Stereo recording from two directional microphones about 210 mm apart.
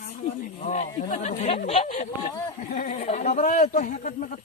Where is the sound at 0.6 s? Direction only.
35° left (ahead or behind).